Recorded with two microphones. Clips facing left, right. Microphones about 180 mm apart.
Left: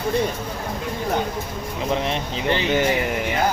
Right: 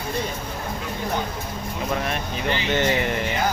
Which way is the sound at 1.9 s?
20° left (ahead or behind).